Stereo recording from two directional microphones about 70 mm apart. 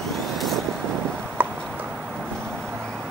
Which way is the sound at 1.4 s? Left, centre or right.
Right.